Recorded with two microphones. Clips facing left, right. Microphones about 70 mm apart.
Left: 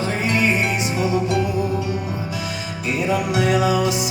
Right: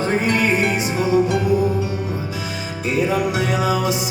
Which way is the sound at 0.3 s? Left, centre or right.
Right.